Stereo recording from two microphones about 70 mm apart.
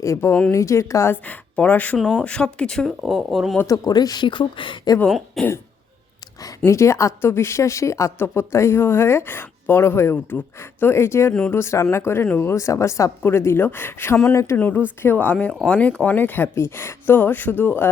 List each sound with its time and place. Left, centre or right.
0.0 s speech: left
1.1 s speech: left
3.1 s speech: centre
3.7 s speech: left
4.9 s speech: left
5.4 s speech: centre
6.7 s speech: left
8.2 s a woman's voice: left
12.5 s a woman's voice: left
14.3 s speech: left
15.0 s speech: left